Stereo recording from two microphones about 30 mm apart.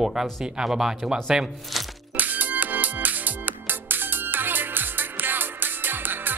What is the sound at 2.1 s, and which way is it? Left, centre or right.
Music, right.